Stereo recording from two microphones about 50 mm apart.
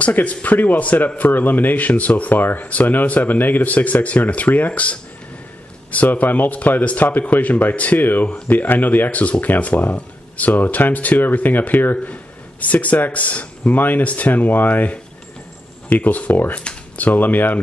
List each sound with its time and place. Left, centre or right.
0.1 s speech: left
16.5 s speech: left